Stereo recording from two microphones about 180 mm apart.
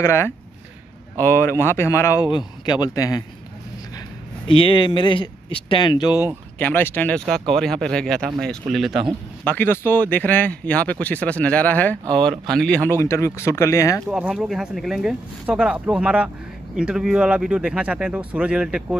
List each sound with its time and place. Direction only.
0.0 s speech: 15° left (ahead or behind)
4.5 s speech: 30° left (ahead or behind)
6.6 s speech: 10° left (ahead or behind)
9.4 s speech: 10° left (ahead or behind)
14.1 s speech: 5° right (ahead or behind)